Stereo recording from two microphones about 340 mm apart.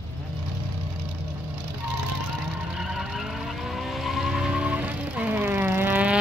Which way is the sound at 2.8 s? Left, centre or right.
Centre.